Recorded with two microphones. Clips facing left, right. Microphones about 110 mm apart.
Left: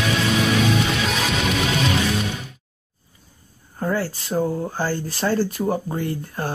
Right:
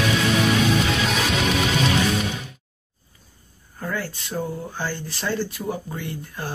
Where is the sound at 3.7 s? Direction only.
35° left (ahead or behind).